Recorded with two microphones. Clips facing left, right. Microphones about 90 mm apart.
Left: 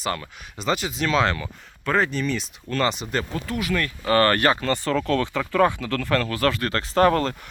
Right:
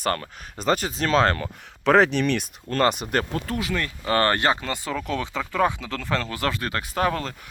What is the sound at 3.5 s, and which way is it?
Speech, 20° right (ahead or behind).